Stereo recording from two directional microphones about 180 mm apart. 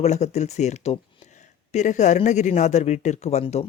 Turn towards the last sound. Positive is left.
turn(degrees=35)  # may be behind; listen again after turning